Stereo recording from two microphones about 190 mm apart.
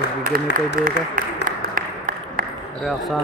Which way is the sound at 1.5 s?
45° right (ahead or behind).